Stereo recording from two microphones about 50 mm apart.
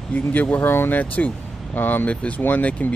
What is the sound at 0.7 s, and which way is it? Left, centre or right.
Speech, left.